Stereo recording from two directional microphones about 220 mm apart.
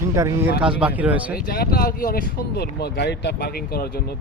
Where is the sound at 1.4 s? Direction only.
45° left (ahead or behind).